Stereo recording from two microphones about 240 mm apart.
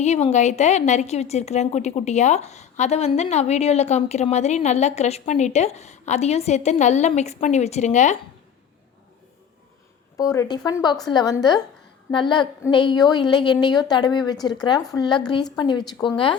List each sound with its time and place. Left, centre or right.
0.0 s a woman's voice: left
10.2 s a woman's voice: centre